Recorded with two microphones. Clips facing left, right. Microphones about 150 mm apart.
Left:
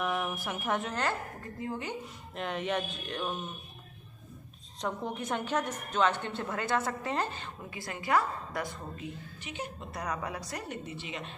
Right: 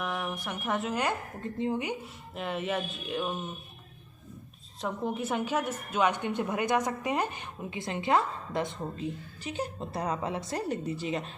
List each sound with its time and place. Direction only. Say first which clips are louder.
0.0 s speech: left 1 dB; centre (ahead or behind)
1.5 s speech: right 6 dB; 20° right (ahead or behind)
2.3 s speech: right 1 dB; 5° right (ahead or behind)
4.8 s a woman's voice: right 3 dB; 5° right (ahead or behind); by 9.0 s 25° right (ahead or behind)
9.4 s a woman's voice: right 6 dB; 35° right (ahead or behind)